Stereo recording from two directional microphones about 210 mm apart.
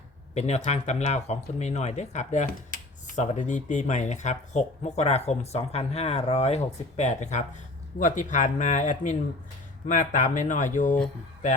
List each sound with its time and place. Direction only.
0.3 s speech: 30° left (ahead or behind)